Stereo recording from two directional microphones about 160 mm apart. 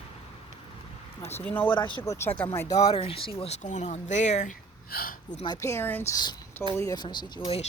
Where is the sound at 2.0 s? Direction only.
15° left (ahead or behind).